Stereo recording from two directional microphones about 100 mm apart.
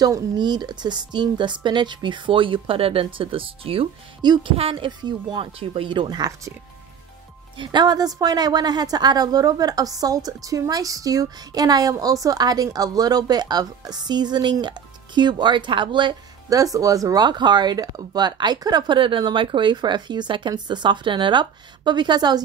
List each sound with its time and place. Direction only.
0.0 s speech: 45° right (ahead or behind); by 3.9 s 70° right (ahead or behind)
4.2 s speech: 50° right (ahead or behind)
7.5 s a woman's voice: 50° right (ahead or behind)
16.4 s speech: 35° right (ahead or behind)